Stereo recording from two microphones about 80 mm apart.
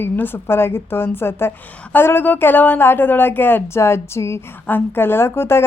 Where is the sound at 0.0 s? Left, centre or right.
Left.